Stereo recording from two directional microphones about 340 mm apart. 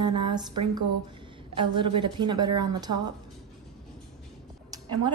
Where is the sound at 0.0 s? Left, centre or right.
Centre.